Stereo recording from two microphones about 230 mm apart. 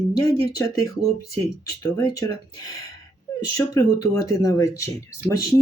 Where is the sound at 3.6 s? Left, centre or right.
Centre.